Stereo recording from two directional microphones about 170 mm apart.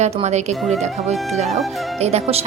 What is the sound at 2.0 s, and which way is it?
Speech, 40° right (ahead or behind).